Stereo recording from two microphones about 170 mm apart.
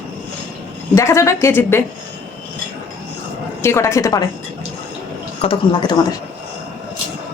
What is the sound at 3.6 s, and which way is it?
Speech, 15° left (ahead or behind).